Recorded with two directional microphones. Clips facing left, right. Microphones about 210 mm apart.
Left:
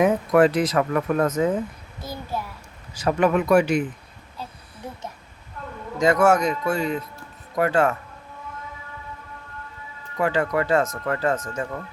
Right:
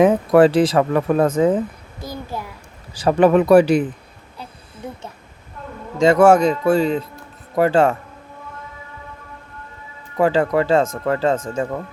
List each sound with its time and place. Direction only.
0.3 s speech: 30° right (ahead or behind)
2.9 s speech: 30° right (ahead or behind)
6.0 s speech: 30° right (ahead or behind)
10.2 s speech: 30° right (ahead or behind)